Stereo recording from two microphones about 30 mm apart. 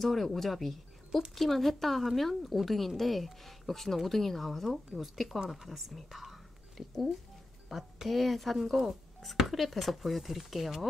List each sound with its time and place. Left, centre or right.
0.0 s speech: centre
6.8 s speech: centre
7.7 s speech: centre
8.8 s speech: right
9.2 s speech: centre